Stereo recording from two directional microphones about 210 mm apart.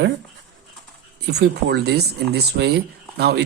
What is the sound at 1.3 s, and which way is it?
Speech, 50° right (ahead or behind).